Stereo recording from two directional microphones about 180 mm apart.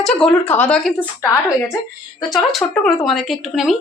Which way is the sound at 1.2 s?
15° left (ahead or behind).